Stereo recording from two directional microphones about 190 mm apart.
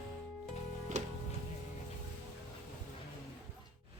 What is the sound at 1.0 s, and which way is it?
Music, 40° right (ahead or behind).